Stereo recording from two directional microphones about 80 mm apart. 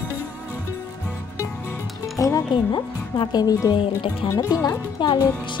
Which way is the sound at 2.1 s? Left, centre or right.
Left.